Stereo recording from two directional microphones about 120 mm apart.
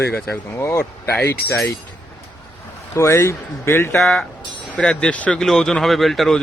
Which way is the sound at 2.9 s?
25° left (ahead or behind).